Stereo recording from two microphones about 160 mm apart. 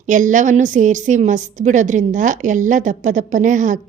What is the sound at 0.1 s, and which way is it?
A woman's voice, 50° right (ahead or behind).